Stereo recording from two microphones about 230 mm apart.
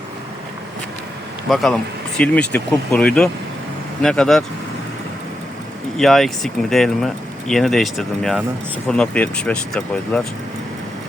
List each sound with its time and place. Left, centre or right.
1.5 s speech: centre
6.0 s speech: centre